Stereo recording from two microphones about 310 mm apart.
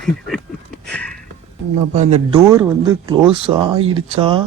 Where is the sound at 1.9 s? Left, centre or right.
Right.